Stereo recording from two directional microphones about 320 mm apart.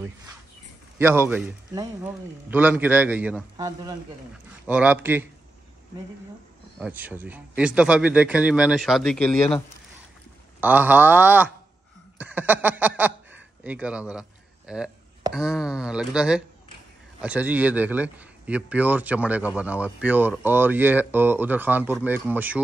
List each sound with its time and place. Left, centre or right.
0.9 s a man's voice: centre
6.8 s a man's voice: centre
10.6 s a man's voice: centre